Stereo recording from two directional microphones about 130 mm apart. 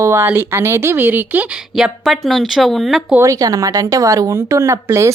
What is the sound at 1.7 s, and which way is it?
Speech, centre (ahead or behind).